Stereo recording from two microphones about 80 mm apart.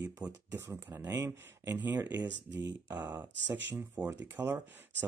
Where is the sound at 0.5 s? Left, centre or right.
Right.